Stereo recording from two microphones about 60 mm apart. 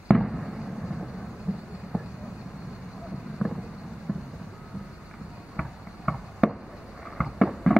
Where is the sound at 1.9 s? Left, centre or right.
Centre.